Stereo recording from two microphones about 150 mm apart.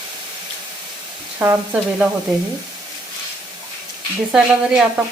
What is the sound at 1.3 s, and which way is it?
Speech, 15° right (ahead or behind).